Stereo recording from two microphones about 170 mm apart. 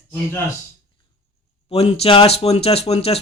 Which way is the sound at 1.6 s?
35° left (ahead or behind).